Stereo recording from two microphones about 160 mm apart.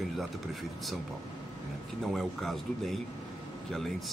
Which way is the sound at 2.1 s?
Centre (ahead or behind).